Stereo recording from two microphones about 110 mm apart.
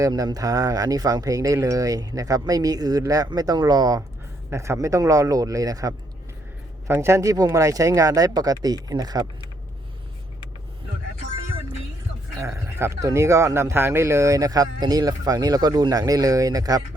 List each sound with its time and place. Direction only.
0.0 s speech: 35° right (ahead or behind)
4.5 s speech: 25° right (ahead or behind)
12.4 s speech: 30° right (ahead or behind)